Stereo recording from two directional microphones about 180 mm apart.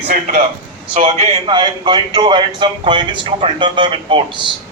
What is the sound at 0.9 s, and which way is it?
Speech, 40° right (ahead or behind).